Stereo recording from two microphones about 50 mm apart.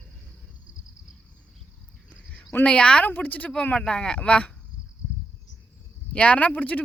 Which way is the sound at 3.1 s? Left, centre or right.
Left.